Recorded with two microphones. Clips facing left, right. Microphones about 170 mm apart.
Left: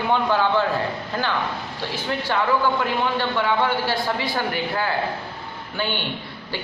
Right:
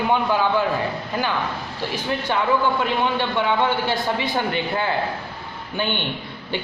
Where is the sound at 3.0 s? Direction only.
20° right (ahead or behind).